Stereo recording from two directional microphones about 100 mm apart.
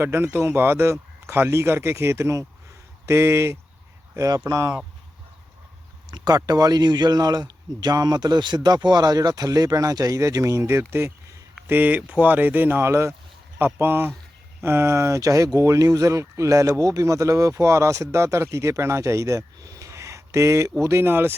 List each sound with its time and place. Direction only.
0.0 s speech: 25° right (ahead or behind)
6.1 s speech: 40° right (ahead or behind)
11.7 s speech: 15° right (ahead or behind)